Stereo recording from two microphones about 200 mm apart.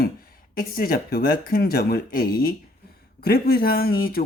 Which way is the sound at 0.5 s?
45° left (ahead or behind).